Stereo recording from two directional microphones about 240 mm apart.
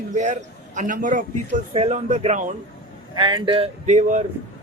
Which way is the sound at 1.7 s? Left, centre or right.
Right.